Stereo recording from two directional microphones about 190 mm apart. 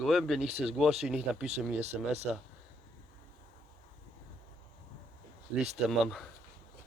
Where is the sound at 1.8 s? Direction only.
35° right (ahead or behind).